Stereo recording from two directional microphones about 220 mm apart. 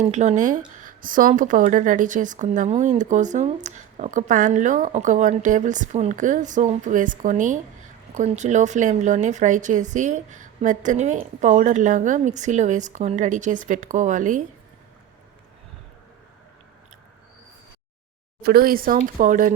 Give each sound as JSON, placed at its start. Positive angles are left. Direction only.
{"t": 0.0, "sound": "speech", "side_deg": -30}
{"t": 18.4, "sound": "speech", "side_deg": -45}